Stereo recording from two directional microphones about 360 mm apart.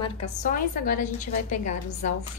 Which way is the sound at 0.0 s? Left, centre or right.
Centre.